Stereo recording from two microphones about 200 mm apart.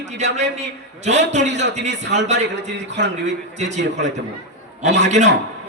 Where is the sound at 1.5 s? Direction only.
60° right (ahead or behind).